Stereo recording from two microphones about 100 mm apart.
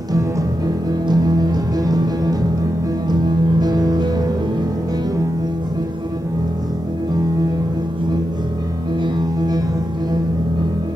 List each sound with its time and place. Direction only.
1.0 s music: 40° right (ahead or behind)